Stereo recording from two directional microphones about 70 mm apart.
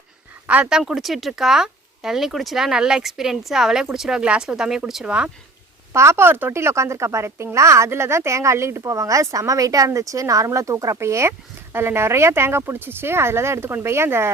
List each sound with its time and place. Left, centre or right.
0.4 s speech: centre
0.7 s speech: centre
5.9 s a woman's voice: right